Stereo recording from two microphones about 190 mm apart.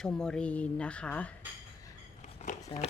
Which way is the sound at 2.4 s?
35° left (ahead or behind).